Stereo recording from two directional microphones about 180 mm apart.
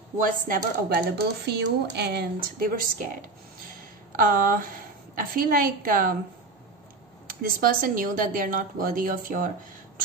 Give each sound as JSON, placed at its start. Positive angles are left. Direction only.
{"t": 0.2, "sound": "speech", "side_deg": -50}
{"t": 7.6, "sound": "speech", "side_deg": -50}